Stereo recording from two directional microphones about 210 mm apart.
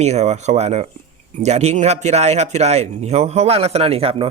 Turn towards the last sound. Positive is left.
turn(degrees=-25)  # may be behind; listen again after turning